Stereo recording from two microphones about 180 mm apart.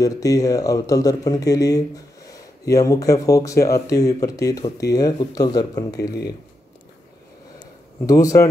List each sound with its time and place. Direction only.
0.0 s speech: 20° left (ahead or behind)
8.1 s speech: 20° left (ahead or behind)